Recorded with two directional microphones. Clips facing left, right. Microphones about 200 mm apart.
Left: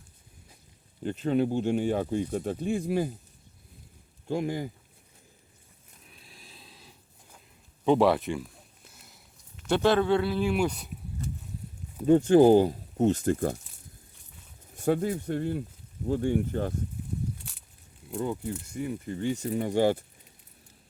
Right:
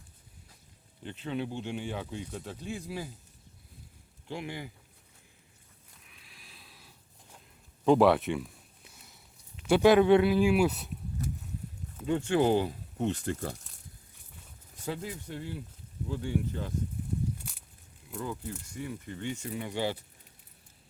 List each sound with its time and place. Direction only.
1.0 s speech: 45° left (ahead or behind)
4.3 s speech: 45° left (ahead or behind)
6.1 s a sound: 30° left (ahead or behind)
7.9 s speech: centre (ahead or behind)
12.0 s speech: 40° left (ahead or behind)
14.8 s speech: 50° left (ahead or behind)
18.1 s speech: 25° left (ahead or behind); by 20.1 s 50° left (ahead or behind)